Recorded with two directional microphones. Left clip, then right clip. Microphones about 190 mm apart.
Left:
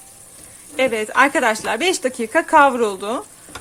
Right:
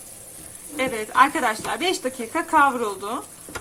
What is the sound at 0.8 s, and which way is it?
A woman's voice, 60° left (ahead or behind).